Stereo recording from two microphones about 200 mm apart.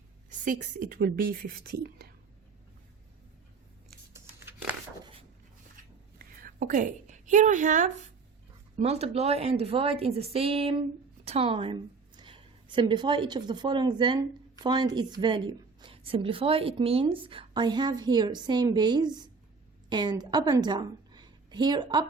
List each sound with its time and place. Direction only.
0.3 s a woman's voice: 40° right (ahead or behind)
6.1 s a sound: 45° right (ahead or behind)
8.7 s a woman's voice: 30° right (ahead or behind)